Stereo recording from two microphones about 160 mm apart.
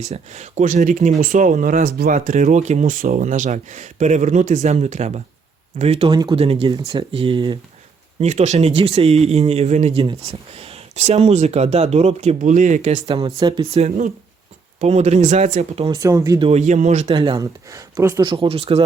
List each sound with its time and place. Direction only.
0.0 s speech: 45° right (ahead or behind)
8.2 s speech: 45° right (ahead or behind)
13.1 s speech: 30° right (ahead or behind)
13.7 s speech: 40° right (ahead or behind)
15.7 s speech: 35° right (ahead or behind)
16.0 s speech: 20° right (ahead or behind)
16.4 s speech: 45° right (ahead or behind)
17.2 s speech: 25° right (ahead or behind)